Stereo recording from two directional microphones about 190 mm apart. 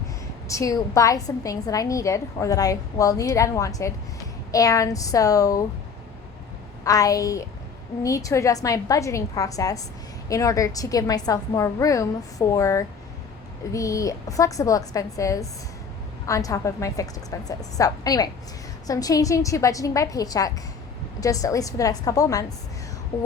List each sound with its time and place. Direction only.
0.4 s a woman's voice: 15° left (ahead or behind)
6.8 s a woman's voice: 20° left (ahead or behind)